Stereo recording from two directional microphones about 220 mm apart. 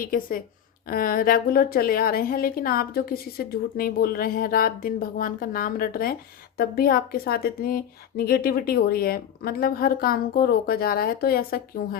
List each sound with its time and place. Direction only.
0.0 s a woman's voice: 40° left (ahead or behind)